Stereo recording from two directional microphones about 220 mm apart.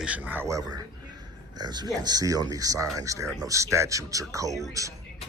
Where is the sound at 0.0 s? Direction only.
5° right (ahead or behind).